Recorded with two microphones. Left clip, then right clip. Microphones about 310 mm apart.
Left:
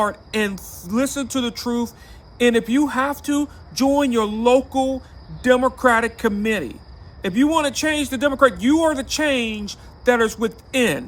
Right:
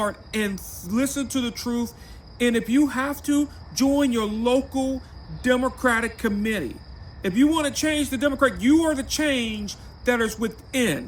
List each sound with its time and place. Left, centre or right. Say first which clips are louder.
0.0 s a man's voice: left 5 dB; centre